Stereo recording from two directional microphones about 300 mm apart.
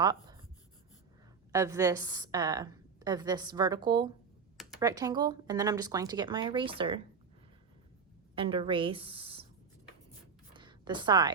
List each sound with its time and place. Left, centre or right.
0.0 s speech: centre
1.5 s a woman's voice: centre
8.4 s a woman's voice: centre
10.5 s a sound: centre